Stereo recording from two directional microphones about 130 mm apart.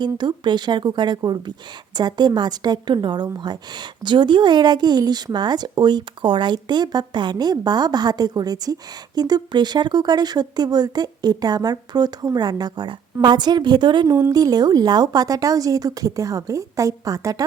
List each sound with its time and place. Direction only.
0.0 s speech: 35° right (ahead or behind)